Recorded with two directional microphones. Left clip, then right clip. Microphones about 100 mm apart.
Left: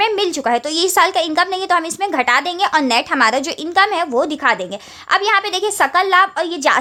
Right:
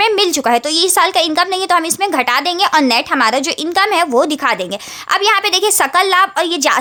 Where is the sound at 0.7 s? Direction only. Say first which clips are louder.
Right 2 dB; 25° right (ahead or behind).